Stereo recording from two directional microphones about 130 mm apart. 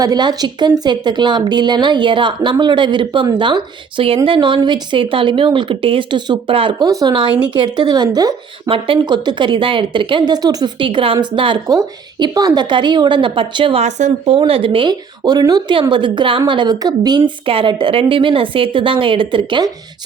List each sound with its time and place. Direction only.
0.0 s a woman's voice: 30° right (ahead or behind)
13.8 s speech: 60° right (ahead or behind)
14.3 s a woman's voice: 45° right (ahead or behind)